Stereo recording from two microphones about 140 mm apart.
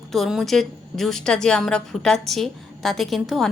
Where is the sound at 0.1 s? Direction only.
Centre (ahead or behind).